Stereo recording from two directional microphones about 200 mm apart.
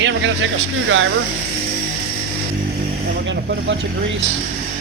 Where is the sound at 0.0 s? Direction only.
65° right (ahead or behind).